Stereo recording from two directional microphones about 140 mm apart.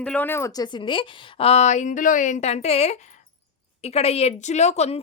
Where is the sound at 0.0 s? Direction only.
10° left (ahead or behind).